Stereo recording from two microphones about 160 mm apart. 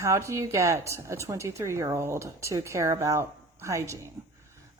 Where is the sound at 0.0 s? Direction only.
20° right (ahead or behind).